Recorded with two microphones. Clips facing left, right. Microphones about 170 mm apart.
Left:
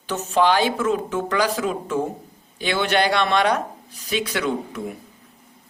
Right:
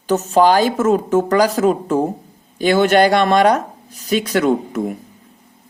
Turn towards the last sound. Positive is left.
turn(degrees=-45)  # may be behind; listen again after turning